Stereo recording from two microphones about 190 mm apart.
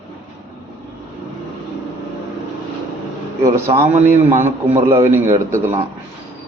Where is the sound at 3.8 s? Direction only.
35° right (ahead or behind).